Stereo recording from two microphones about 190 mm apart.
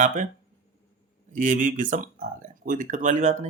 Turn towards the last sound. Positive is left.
turn(degrees=-35)  # may be behind; listen again after turning